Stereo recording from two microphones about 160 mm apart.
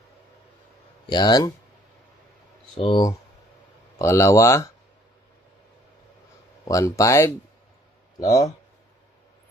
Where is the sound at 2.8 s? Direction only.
35° left (ahead or behind).